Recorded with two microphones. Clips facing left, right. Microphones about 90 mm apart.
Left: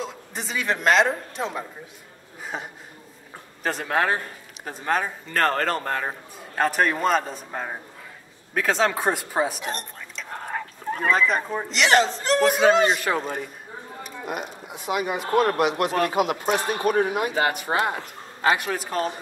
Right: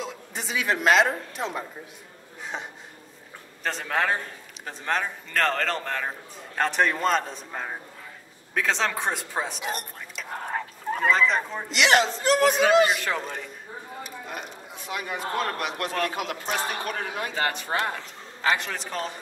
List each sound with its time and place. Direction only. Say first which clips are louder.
0.0 s a man's voice: left 2 dB; centre (ahead or behind)
2.4 s a sound: left 2 dB; 5° left (ahead or behind)
3.6 s a man's voice: left 3 dB; 5° left (ahead or behind)
9.7 s speech: even; 5° right (ahead or behind)
13.0 s a man's voice: left 4 dB; 15° left (ahead or behind)